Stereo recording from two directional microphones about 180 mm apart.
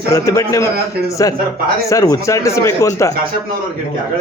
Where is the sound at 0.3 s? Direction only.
15° left (ahead or behind).